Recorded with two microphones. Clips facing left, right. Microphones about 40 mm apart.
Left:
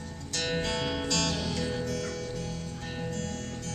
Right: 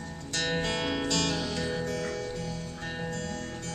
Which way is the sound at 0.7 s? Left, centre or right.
Right.